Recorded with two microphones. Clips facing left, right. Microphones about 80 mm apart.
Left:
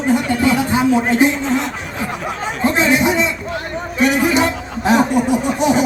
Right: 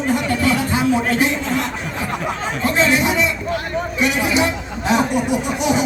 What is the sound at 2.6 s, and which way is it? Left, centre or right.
Speech, left.